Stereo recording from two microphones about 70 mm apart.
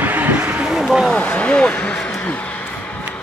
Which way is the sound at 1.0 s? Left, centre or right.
Centre.